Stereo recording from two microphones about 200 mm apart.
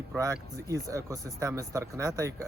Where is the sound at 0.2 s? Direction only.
15° right (ahead or behind).